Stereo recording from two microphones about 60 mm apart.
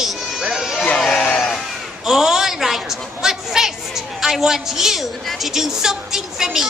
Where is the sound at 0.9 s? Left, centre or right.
Centre.